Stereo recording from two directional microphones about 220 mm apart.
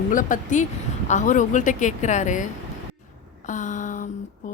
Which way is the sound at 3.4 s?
35° left (ahead or behind).